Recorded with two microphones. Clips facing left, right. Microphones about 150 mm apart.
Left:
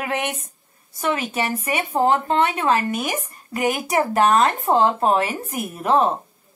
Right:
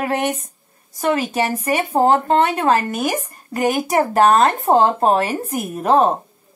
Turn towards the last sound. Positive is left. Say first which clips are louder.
# right 3 dB
turn(degrees=-35)  # may be behind; listen again after turning